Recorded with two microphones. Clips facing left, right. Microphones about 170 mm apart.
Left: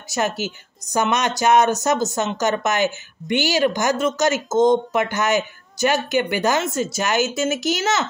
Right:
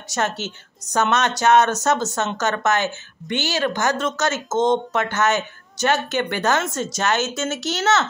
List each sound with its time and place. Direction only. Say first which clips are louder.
0.1 s speech: left 2 dB; 10° left (ahead or behind)